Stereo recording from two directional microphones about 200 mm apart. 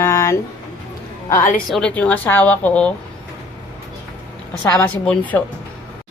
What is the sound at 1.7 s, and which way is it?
A woman's voice, 5° left (ahead or behind).